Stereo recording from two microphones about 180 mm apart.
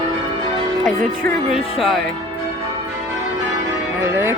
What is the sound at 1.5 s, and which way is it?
Speech, centre (ahead or behind).